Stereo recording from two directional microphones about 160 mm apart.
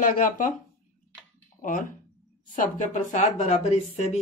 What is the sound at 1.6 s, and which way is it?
Speech, 55° left (ahead or behind).